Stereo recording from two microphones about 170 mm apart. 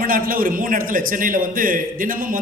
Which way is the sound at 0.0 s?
55° right (ahead or behind).